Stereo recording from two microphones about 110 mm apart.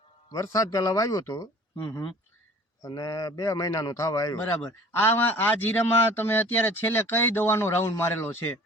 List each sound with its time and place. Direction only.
0.3 s a man's voice: 30° left (ahead or behind)
2.8 s a man's voice: 35° left (ahead or behind)
4.4 s a man's voice: 20° left (ahead or behind)